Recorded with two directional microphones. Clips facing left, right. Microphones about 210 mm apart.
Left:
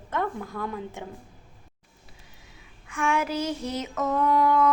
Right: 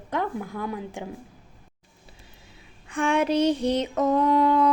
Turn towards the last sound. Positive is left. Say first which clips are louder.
# right 2 dB
turn(degrees=-25)  # may be behind; listen again after turning